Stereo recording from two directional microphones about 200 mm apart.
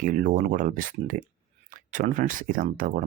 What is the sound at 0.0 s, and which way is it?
Speech, 40° right (ahead or behind).